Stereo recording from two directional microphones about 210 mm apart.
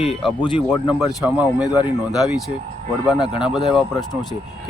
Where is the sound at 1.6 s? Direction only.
20° left (ahead or behind).